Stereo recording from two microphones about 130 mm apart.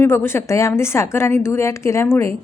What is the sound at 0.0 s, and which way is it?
A woman's voice, 20° left (ahead or behind).